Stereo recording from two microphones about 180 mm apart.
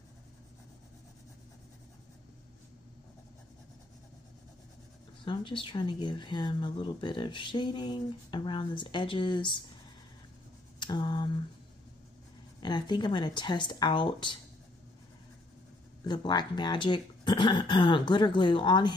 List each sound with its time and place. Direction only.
5.2 s speech: 25° left (ahead or behind)
10.8 s speech: 25° left (ahead or behind)
12.5 s speech: 25° left (ahead or behind)
16.0 s speech: 25° left (ahead or behind)